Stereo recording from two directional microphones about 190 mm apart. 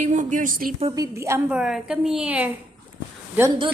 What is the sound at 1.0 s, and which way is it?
A woman's voice, 15° right (ahead or behind).